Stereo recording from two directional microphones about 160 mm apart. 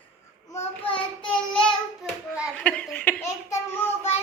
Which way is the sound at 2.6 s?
10° left (ahead or behind).